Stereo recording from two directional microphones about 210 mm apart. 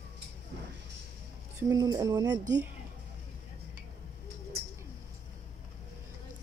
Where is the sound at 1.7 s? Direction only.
15° right (ahead or behind).